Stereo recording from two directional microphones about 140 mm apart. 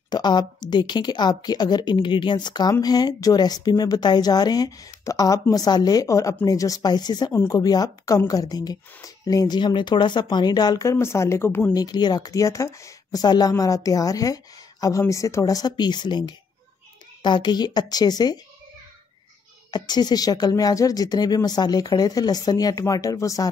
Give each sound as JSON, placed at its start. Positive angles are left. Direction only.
{"t": 0.1, "sound": "a woman's voice", "side_deg": 30}
{"t": 11.7, "sound": "a woman's voice", "side_deg": 30}
{"t": 19.7, "sound": "a woman's voice", "side_deg": 30}